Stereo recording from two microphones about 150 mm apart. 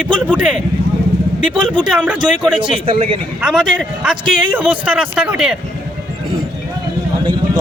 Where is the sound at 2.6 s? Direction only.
35° right (ahead or behind).